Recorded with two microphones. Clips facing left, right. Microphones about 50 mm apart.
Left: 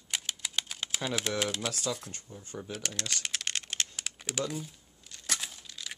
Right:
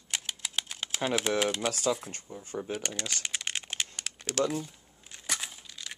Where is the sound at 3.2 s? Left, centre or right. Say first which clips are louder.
Even; centre.